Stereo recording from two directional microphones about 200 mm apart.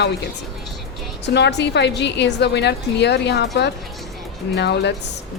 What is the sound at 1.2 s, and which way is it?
A woman's voice, 60° left (ahead or behind).